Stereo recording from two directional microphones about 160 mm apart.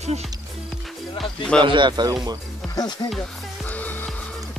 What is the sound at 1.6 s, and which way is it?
Speech, 30° right (ahead or behind).